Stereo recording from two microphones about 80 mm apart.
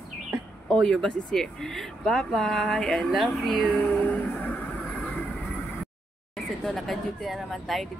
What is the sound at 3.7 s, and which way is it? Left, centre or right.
Speech, centre.